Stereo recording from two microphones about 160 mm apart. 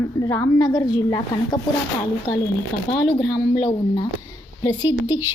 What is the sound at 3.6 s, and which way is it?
Speech, 25° left (ahead or behind).